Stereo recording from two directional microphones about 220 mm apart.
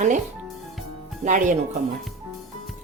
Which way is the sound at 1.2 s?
35° right (ahead or behind).